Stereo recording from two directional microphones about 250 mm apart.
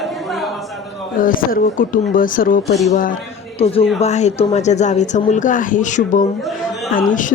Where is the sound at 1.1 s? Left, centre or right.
Left.